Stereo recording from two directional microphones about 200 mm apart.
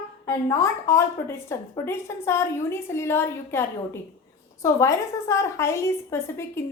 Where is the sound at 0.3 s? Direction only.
15° left (ahead or behind).